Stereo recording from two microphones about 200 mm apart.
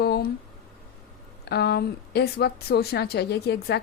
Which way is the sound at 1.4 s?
55° left (ahead or behind).